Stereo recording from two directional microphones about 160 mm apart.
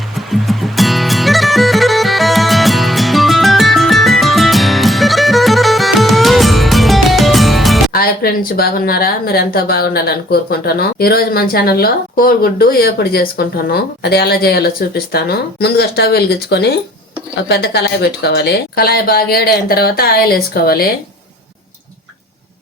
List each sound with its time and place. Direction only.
0.3 s music: centre (ahead or behind)
7.9 s speech: 65° left (ahead or behind)